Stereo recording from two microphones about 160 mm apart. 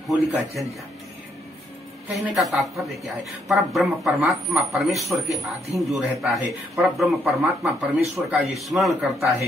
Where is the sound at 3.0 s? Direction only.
Centre (ahead or behind).